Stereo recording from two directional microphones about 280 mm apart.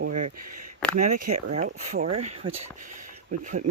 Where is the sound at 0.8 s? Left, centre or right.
Centre.